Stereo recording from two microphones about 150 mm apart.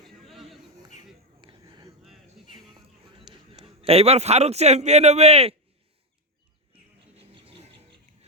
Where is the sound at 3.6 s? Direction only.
40° right (ahead or behind).